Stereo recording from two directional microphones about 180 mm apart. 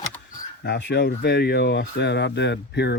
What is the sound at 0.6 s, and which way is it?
Speech, 70° left (ahead or behind).